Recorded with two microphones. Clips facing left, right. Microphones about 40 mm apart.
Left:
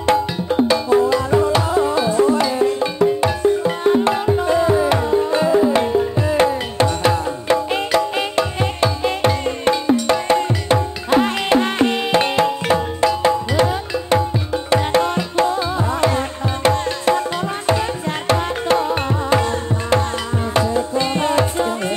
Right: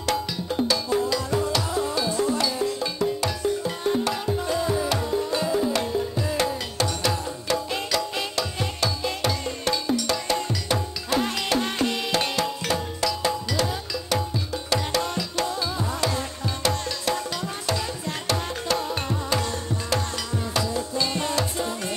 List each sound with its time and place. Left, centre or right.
0.0 s music: left